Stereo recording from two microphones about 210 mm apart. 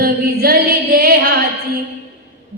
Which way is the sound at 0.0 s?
45° right (ahead or behind).